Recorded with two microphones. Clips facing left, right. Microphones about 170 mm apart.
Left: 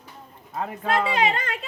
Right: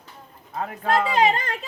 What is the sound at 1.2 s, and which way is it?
Speech, 40° right (ahead or behind).